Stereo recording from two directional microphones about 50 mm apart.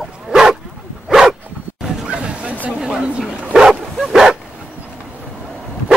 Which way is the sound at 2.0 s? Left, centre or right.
Right.